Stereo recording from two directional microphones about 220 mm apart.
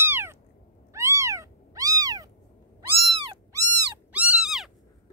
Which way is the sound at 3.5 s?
15° right (ahead or behind).